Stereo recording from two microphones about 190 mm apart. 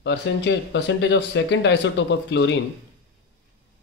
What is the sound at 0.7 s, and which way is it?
Speech, 70° left (ahead or behind).